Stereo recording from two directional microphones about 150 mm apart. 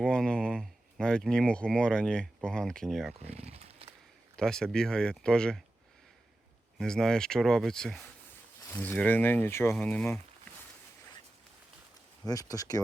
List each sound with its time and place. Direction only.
0.0 s speech: 5° left (ahead or behind)
3.2 s wild animals: 45° right (ahead or behind)
4.4 s speech: 5° left (ahead or behind)
6.7 s speech: 5° left (ahead or behind)
12.2 s speech: 25° left (ahead or behind)